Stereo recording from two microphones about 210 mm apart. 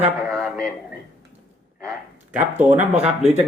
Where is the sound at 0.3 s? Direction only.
Centre (ahead or behind).